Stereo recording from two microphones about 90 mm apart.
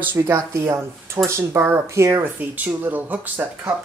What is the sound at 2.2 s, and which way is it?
Speech, 20° right (ahead or behind).